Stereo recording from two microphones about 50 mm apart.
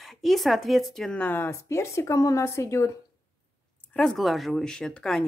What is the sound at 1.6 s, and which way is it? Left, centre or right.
A woman's voice, left.